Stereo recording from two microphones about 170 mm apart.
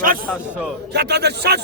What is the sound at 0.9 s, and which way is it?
Speech, 75° right (ahead or behind).